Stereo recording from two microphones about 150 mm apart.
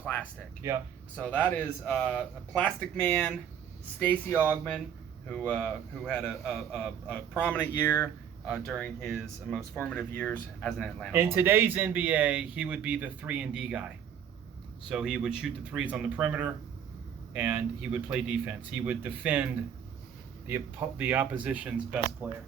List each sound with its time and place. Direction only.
0.0 s speech: 10° left (ahead or behind)
0.6 s speech: 20° right (ahead or behind)
1.1 s speech: 10° left (ahead or behind)
5.5 s speech: 10° left (ahead or behind)
8.4 s speech: centre (ahead or behind)
11.1 s speech: 15° right (ahead or behind)
14.8 s speech: 5° right (ahead or behind)
20.5 s speech: 15° right (ahead or behind)